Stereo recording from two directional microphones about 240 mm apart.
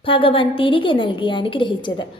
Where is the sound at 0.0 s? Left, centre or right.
Left.